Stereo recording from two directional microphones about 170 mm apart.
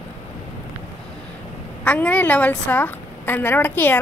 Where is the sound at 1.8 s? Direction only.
10° left (ahead or behind).